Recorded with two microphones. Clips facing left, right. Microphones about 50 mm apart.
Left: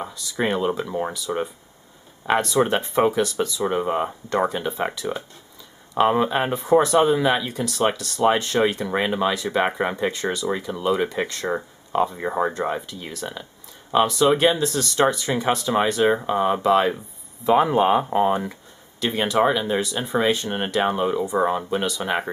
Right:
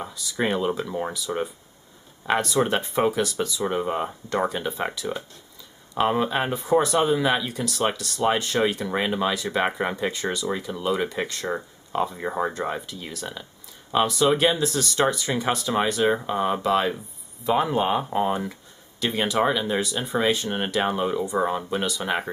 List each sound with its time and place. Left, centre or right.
0.0 s speech: centre